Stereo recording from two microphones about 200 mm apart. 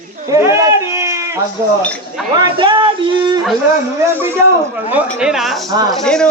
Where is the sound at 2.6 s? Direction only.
25° right (ahead or behind).